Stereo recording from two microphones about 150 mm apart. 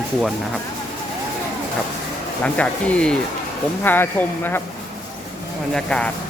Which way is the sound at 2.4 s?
10° left (ahead or behind).